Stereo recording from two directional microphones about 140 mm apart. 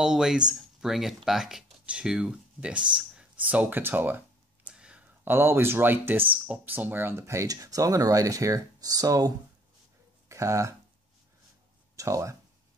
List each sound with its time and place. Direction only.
0.0 s speech: 5° right (ahead or behind); by 10.8 s 20° right (ahead or behind)
12.0 s speech: 20° right (ahead or behind)